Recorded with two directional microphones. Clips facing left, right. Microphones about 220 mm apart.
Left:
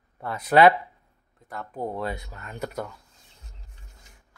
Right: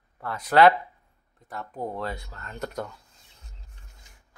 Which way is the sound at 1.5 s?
Centre (ahead or behind).